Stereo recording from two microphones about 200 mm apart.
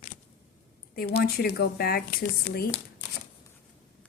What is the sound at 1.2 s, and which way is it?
A woman's voice, 50° left (ahead or behind).